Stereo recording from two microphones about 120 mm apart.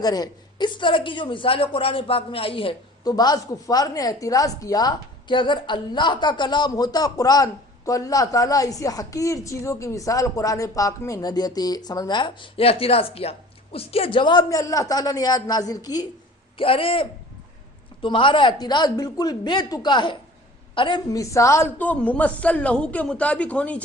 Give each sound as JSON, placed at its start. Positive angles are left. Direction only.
{"t": 0.0, "sound": "a woman's voice", "side_deg": 35}
{"t": 3.0, "sound": "a woman's voice", "side_deg": 35}
{"t": 14.5, "sound": "a woman's voice", "side_deg": 30}
{"t": 16.6, "sound": "a woman's voice", "side_deg": 50}